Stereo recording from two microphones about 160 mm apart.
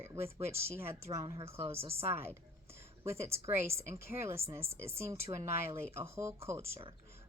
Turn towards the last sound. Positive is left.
turn(degrees=-15)  # may be behind; listen again after turning